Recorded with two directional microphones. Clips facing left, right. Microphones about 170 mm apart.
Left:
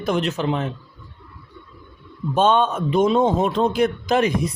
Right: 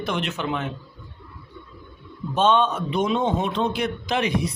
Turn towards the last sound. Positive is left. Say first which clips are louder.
# left 6 dB
turn(degrees=45)  # may be behind; listen again after turning